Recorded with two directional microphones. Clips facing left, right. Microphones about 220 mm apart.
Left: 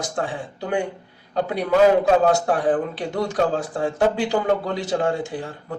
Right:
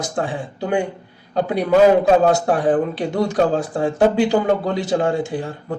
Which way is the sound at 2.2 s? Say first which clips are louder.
Right 3 dB; 15° right (ahead or behind).